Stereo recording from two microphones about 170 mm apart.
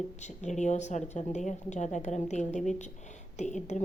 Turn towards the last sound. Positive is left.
turn(degrees=45)  # may be behind; listen again after turning